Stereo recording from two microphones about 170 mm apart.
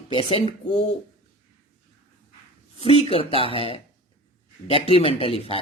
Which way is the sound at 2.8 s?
35° left (ahead or behind).